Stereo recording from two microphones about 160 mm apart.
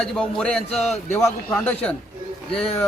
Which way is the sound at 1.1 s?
15° left (ahead or behind).